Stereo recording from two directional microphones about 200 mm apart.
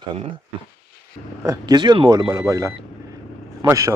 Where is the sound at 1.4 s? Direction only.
20° right (ahead or behind).